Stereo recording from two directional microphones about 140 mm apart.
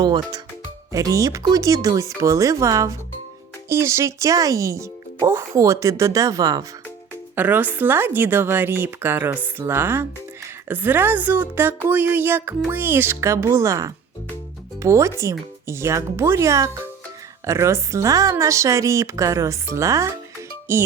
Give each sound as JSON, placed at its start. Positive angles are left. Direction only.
{"t": 0.0, "sound": "speech", "side_deg": -30}
{"t": 7.3, "sound": "a woman's voice", "side_deg": -10}